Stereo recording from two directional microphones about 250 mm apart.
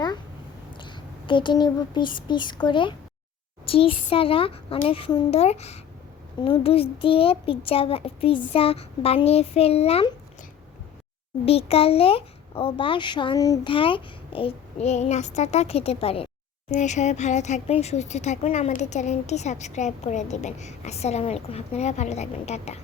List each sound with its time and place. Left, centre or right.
0.7 s speech: centre
11.4 s speech: left